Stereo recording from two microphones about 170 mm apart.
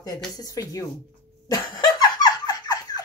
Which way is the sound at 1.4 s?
20° left (ahead or behind).